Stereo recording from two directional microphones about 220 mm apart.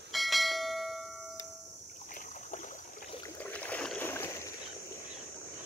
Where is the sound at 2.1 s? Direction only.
35° left (ahead or behind).